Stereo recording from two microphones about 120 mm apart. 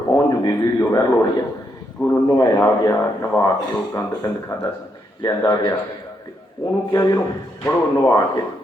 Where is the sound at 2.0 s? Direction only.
35° left (ahead or behind).